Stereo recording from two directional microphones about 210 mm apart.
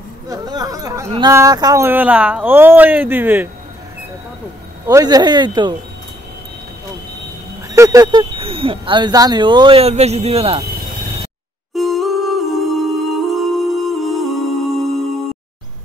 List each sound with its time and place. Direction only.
0.3 s speech: 15° right (ahead or behind)
4.8 s speech: 15° right (ahead or behind)
7.7 s speech: 15° right (ahead or behind)
11.7 s music: centre (ahead or behind)